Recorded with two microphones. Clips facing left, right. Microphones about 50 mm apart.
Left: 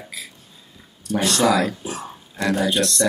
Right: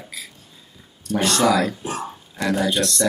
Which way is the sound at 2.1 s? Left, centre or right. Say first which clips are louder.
Left 3 dB; centre.